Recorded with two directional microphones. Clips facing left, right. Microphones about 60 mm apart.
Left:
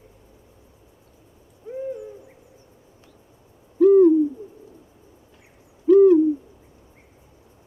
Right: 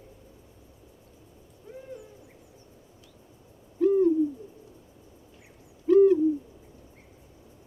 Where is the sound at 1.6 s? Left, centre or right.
Centre.